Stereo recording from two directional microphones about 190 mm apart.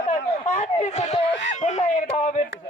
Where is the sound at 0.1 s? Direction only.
35° left (ahead or behind).